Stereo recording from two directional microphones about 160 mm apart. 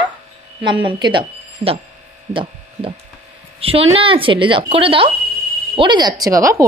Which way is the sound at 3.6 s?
35° right (ahead or behind).